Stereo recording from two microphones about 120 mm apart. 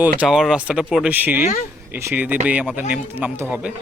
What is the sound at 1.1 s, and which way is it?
Speech, 15° right (ahead or behind).